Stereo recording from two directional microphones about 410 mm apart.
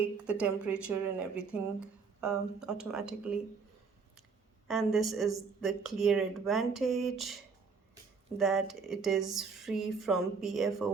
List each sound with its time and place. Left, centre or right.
0.0 s a woman's voice: centre
4.7 s a woman's voice: centre
8.4 s a woman's voice: centre